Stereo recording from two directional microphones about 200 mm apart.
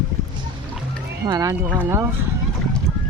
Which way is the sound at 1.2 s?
20° right (ahead or behind).